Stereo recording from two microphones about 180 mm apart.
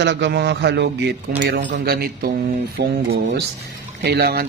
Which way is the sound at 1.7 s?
60° right (ahead or behind).